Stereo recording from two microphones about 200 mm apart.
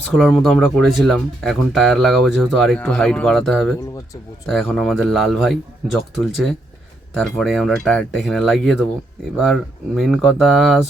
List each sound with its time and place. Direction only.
0.1 s speech: centre (ahead or behind)